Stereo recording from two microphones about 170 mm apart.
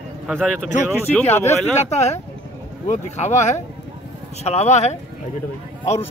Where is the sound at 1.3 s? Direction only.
15° left (ahead or behind).